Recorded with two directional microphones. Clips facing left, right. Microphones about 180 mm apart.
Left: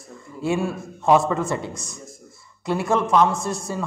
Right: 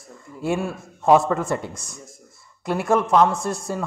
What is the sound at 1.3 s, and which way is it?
A man's voice, 50° right (ahead or behind).